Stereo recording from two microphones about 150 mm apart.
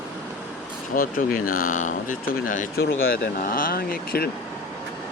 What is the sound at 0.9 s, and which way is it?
Speech, 70° left (ahead or behind).